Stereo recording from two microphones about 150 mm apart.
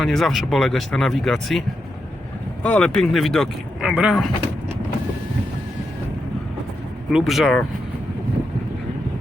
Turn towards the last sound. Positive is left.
turn(degrees=0)  # may be behind; listen again after turning